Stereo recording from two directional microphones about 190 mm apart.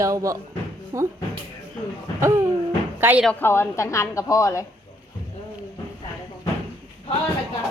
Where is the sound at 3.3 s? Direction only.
10° left (ahead or behind).